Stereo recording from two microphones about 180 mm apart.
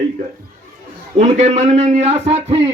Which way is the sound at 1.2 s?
35° right (ahead or behind).